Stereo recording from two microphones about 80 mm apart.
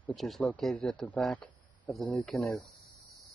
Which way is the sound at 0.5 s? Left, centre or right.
Centre.